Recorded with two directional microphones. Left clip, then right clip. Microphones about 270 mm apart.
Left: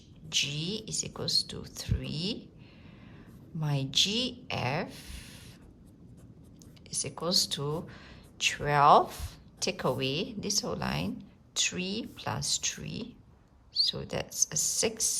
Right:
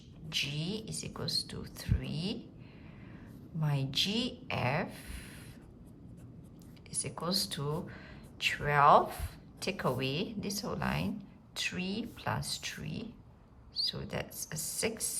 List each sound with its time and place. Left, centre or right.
0.3 s speech: centre
3.6 s speech: centre
7.0 s speech: centre